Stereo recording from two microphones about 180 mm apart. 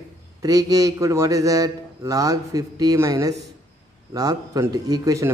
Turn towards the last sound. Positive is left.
turn(degrees=-20)  # may be behind; listen again after turning